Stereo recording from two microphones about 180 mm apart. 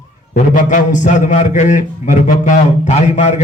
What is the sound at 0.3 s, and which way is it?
A man's voice, 45° left (ahead or behind).